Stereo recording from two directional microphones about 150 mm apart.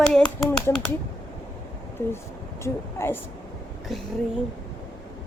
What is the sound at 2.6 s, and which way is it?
Speech, 15° left (ahead or behind).